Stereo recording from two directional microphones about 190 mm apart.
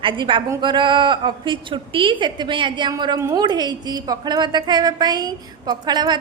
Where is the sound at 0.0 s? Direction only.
25° right (ahead or behind).